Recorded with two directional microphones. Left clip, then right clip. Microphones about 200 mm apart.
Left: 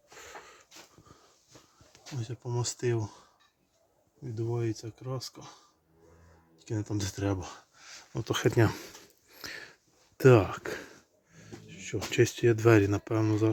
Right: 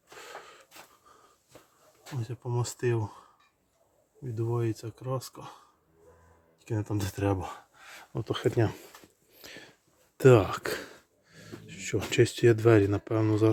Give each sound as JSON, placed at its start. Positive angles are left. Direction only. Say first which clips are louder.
{"t": 0.1, "sound": "a sound", "louder": "right 2 dB", "side_deg": -10}
{"t": 2.1, "sound": "speech", "louder": "right 2 dB", "side_deg": 0}
{"t": 4.4, "sound": "speech", "louder": "right 2 dB", "side_deg": -5}
{"t": 6.6, "sound": "speech", "louder": "right 1 dB", "side_deg": -10}
{"t": 8.1, "sound": "speech", "louder": "left 1 dB", "side_deg": 5}
{"t": 9.3, "sound": "a sound", "louder": "left 5 dB", "side_deg": 15}
{"t": 10.2, "sound": "speech", "louder": "right 1 dB", "side_deg": 0}
{"t": 10.5, "sound": "a sound", "louder": "right 4 dB", "side_deg": -10}
{"t": 12.5, "sound": "speech", "louder": "right 1 dB", "side_deg": 0}